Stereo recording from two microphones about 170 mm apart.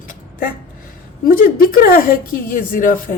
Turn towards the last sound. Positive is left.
turn(degrees=55)  # may be behind; listen again after turning